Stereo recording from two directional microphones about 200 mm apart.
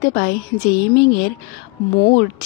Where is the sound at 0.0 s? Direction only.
45° left (ahead or behind).